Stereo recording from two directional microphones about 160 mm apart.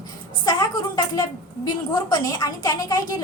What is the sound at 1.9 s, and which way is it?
A child's voice, 25° left (ahead or behind).